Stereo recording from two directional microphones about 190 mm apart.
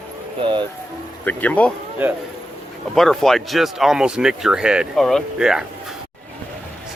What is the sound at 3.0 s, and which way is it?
Speech, centre (ahead or behind).